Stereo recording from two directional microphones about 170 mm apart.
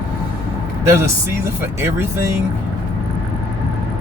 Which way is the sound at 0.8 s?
15° right (ahead or behind).